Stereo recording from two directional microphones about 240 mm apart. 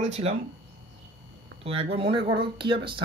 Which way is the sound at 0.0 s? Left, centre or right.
Right.